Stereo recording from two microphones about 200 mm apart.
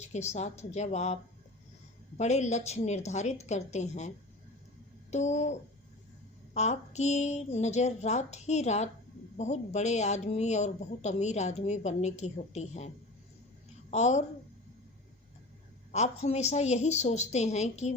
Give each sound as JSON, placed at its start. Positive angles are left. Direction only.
{"t": 0.0, "sound": "speech", "side_deg": 35}
{"t": 5.1, "sound": "speech", "side_deg": 35}
{"t": 13.9, "sound": "speech", "side_deg": 35}
{"t": 15.9, "sound": "speech", "side_deg": 35}